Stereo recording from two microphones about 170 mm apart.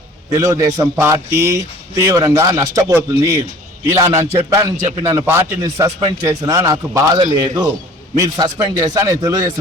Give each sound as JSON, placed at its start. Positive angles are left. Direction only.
{"t": 0.3, "sound": "a man's voice", "side_deg": -20}